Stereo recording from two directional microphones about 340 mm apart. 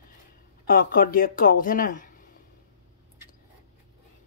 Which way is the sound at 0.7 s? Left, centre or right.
Left.